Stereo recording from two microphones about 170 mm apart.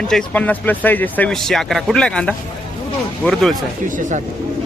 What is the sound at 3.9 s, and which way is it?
Speech, 50° right (ahead or behind).